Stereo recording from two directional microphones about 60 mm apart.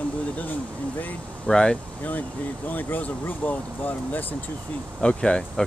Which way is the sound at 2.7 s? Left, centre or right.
Left.